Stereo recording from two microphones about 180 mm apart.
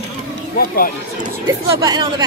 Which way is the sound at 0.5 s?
55° left (ahead or behind).